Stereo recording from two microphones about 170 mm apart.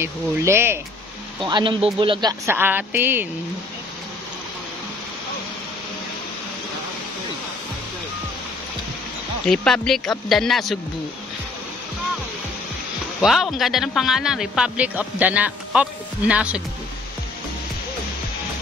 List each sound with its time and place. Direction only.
0.0 s a woman's voice: 15° right (ahead or behind)
1.4 s speech: 30° right (ahead or behind)
2.4 s a woman's voice: 10° right (ahead or behind)
9.5 s a man's voice: centre (ahead or behind)
13.2 s a man's voice: centre (ahead or behind)